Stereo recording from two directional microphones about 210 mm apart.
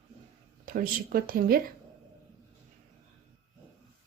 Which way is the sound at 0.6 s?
40° right (ahead or behind).